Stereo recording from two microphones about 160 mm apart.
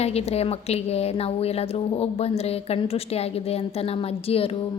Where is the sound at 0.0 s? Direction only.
40° left (ahead or behind).